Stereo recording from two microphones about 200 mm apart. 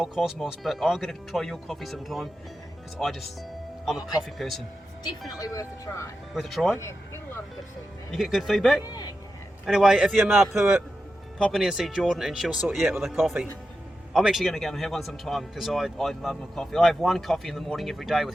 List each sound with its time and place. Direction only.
0.0 s a man's voice: centre (ahead or behind)
4.4 s a man's voice: centre (ahead or behind)
5.4 s speech: 15° left (ahead or behind)
6.3 s a man's voice: centre (ahead or behind)
8.1 s a man's voice: centre (ahead or behind)
8.8 s a man's voice: 20° left (ahead or behind)
9.6 s a man's voice: centre (ahead or behind)